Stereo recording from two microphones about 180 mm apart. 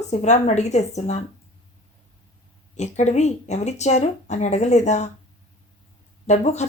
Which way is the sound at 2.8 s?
40° left (ahead or behind).